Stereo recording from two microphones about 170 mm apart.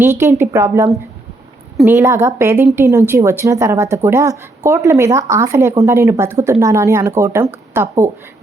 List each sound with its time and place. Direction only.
0.0 s speech: 15° right (ahead or behind)